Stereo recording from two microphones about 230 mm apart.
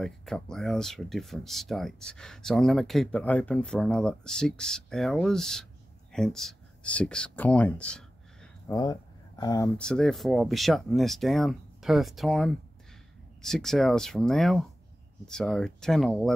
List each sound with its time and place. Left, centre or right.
0.0 s speech: centre
9.4 s speech: centre
9.8 s speech: centre